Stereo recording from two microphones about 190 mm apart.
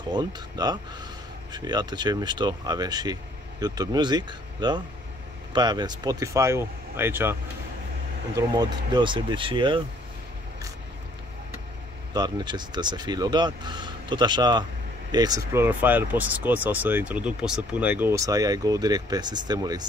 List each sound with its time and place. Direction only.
0.1 s speech: 20° right (ahead or behind)
8.4 s speech: 20° right (ahead or behind)
12.1 s speech: 20° right (ahead or behind)